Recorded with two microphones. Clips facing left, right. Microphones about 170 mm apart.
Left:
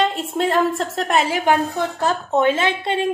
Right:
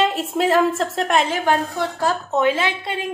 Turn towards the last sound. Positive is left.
turn(degrees=25)  # may be behind; listen again after turning